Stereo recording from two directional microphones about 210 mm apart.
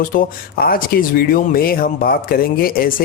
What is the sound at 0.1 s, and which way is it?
Speech, 45° left (ahead or behind).